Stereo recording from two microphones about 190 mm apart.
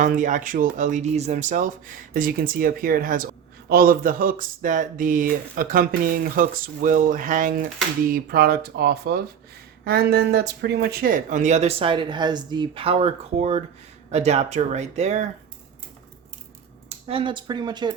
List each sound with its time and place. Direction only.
0.0 s speech: 45° right (ahead or behind)
17.1 s speech: 25° right (ahead or behind)